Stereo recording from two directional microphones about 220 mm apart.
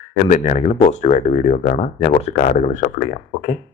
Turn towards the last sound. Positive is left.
turn(degrees=35)  # may be behind; listen again after turning